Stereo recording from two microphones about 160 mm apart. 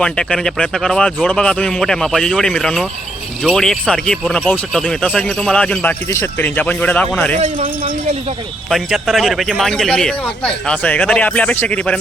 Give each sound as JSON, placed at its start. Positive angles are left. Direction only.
{"t": 0.0, "sound": "speech", "side_deg": 5}
{"t": 7.3, "sound": "speech", "side_deg": -40}
{"t": 8.7, "sound": "speech", "side_deg": 0}